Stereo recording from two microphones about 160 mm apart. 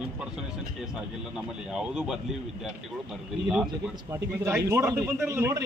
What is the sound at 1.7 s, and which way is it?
Speech, 5° right (ahead or behind).